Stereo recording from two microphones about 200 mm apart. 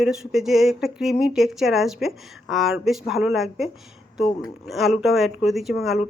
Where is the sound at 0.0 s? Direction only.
Centre (ahead or behind).